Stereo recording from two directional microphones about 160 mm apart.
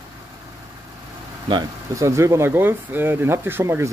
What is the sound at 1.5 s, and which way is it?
Speech, 20° right (ahead or behind).